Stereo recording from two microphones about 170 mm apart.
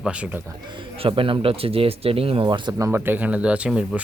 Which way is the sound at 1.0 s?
30° right (ahead or behind).